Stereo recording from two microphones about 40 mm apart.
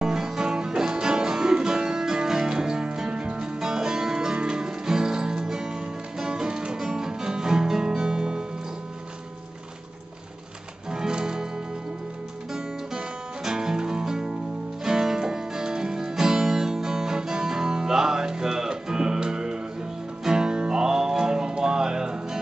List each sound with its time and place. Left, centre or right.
0.0 s music: centre
10.9 s music: centre